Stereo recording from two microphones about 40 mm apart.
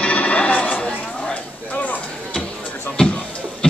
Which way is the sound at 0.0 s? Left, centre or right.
Left.